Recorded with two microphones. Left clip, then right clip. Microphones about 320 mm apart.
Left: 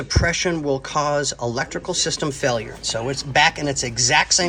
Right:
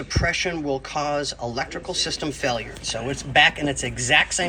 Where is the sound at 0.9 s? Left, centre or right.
Left.